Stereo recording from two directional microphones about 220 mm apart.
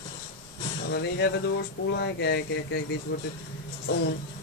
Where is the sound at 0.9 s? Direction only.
50° left (ahead or behind).